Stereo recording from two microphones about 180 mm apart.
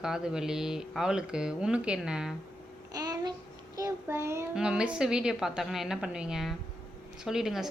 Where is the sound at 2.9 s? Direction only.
20° right (ahead or behind).